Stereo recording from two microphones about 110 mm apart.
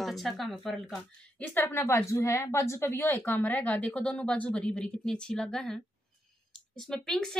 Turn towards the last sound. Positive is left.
turn(degrees=5)  # may be behind; listen again after turning